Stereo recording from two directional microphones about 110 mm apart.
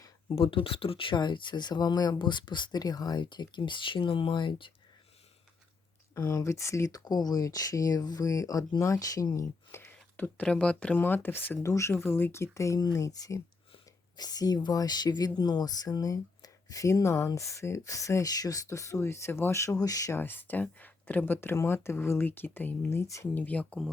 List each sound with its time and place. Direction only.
0.3 s speech: 55° left (ahead or behind)
6.1 s speech: 35° left (ahead or behind)
20.1 s speech: 20° left (ahead or behind)
23.3 s speech: 15° left (ahead or behind)